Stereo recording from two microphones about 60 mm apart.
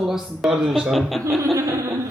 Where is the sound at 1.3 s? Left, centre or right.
Right.